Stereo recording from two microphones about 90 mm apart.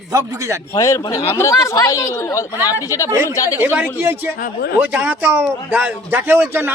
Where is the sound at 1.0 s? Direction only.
40° left (ahead or behind).